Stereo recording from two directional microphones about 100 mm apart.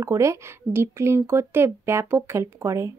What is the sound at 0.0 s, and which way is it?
Speech, 30° right (ahead or behind).